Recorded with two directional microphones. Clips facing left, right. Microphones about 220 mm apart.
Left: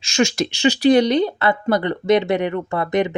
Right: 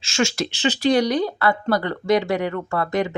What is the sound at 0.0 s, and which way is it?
Speech, 15° left (ahead or behind).